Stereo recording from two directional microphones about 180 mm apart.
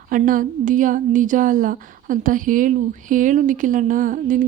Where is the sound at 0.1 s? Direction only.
50° right (ahead or behind).